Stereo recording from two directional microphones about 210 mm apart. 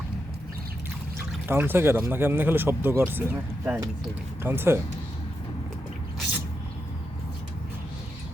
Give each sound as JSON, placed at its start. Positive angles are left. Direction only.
{"t": 1.5, "sound": "speech", "side_deg": -10}